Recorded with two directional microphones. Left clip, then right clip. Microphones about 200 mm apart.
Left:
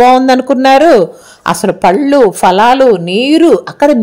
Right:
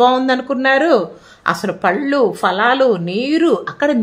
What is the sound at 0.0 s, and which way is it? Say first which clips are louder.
A woman's voice: left 7 dB; 35° left (ahead or behind).